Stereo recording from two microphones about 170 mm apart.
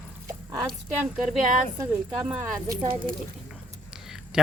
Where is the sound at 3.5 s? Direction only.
5° right (ahead or behind).